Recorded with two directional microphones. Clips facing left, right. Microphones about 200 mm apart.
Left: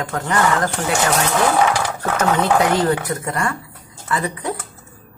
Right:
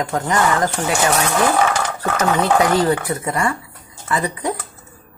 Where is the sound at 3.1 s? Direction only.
10° right (ahead or behind).